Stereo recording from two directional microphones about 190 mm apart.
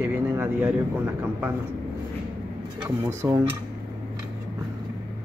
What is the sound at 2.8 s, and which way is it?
Speech, 20° right (ahead or behind).